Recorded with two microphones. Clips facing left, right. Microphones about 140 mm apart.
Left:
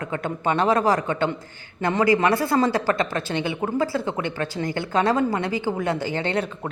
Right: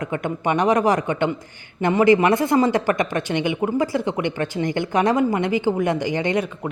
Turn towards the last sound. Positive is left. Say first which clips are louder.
# right 3 dB
turn(degrees=-15)  # may be behind; listen again after turning